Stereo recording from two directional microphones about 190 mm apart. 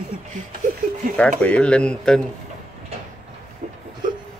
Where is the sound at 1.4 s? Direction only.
5° left (ahead or behind).